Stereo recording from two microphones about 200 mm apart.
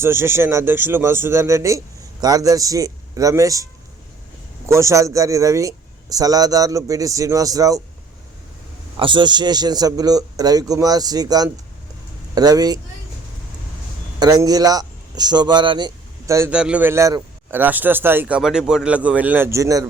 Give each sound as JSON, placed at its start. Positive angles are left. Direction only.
{"t": 0.0, "sound": "speech", "side_deg": -10}
{"t": 4.7, "sound": "speech", "side_deg": -15}
{"t": 9.0, "sound": "a man's voice", "side_deg": -25}
{"t": 14.2, "sound": "speech", "side_deg": -20}